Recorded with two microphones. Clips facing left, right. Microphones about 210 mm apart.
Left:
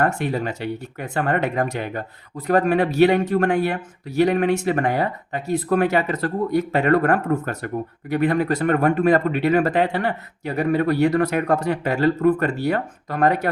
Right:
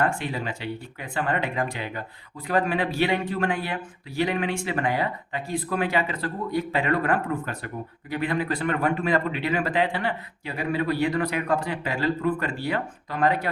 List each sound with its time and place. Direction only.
0.0 s speech: 50° left (ahead or behind)